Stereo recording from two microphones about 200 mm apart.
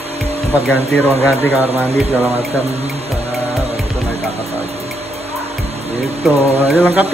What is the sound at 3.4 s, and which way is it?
Music, 30° right (ahead or behind).